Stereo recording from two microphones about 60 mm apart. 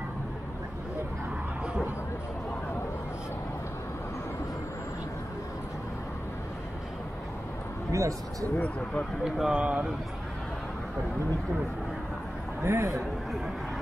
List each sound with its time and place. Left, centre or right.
7.9 s a man's voice: right
8.5 s speech: left
9.2 s speech: centre
12.6 s a man's voice: right